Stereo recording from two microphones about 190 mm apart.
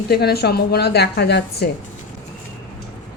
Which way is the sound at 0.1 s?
55° left (ahead or behind).